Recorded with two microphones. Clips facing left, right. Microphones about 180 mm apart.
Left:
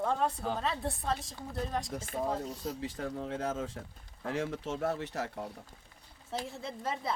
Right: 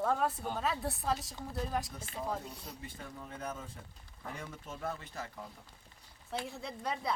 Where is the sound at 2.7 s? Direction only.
80° left.